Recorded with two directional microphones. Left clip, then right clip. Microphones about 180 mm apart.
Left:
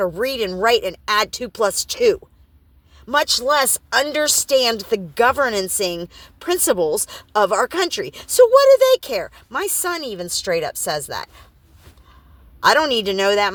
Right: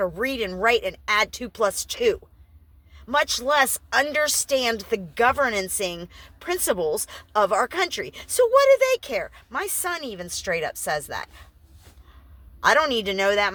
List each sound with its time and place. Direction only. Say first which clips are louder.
0.2 s speech: left 4 dB; 35° left (ahead or behind)
12.5 s speech: left 4 dB; 35° left (ahead or behind)